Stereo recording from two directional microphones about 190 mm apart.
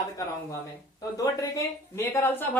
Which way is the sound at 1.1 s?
20° left (ahead or behind).